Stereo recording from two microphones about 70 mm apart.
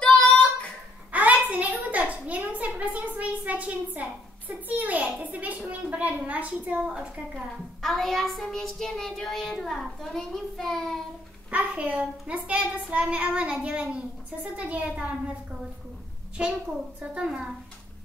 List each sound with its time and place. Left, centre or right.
0.0 s child singing: centre
1.1 s a sound: right
5.7 s a woman's voice: right
7.8 s child singing: centre
11.5 s a child's voice: centre
17.0 s a child's voice: centre